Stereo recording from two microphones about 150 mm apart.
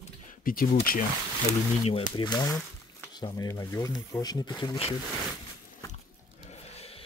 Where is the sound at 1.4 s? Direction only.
45° left (ahead or behind).